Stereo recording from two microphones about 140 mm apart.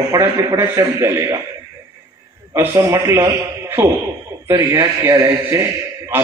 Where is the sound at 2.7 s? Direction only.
20° right (ahead or behind).